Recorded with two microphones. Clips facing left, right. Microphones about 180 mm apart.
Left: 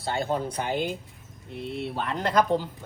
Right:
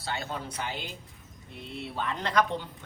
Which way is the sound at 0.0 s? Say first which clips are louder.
Left 8 dB; 50° left (ahead or behind).